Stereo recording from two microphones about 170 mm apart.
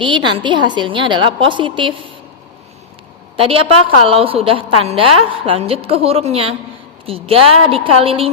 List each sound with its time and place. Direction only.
0.0 s a woman's voice: 30° right (ahead or behind)
3.3 s a woman's voice: 35° right (ahead or behind)